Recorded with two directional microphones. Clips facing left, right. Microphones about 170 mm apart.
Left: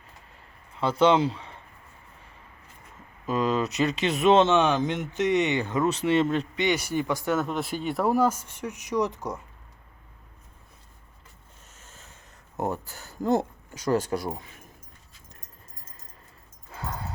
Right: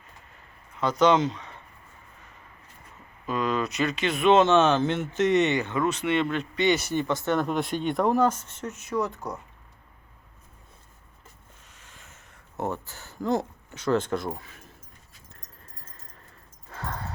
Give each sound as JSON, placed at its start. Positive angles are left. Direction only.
{"t": 0.8, "sound": "speech", "side_deg": 30}
{"t": 3.2, "sound": "speech", "side_deg": 30}
{"t": 4.4, "sound": "speech", "side_deg": 15}
{"t": 5.8, "sound": "speech", "side_deg": 35}
{"t": 6.6, "sound": "speech", "side_deg": 10}
{"t": 11.7, "sound": "a sound", "side_deg": 45}
{"t": 12.5, "sound": "speech", "side_deg": 15}
{"t": 16.7, "sound": "a sound", "side_deg": 0}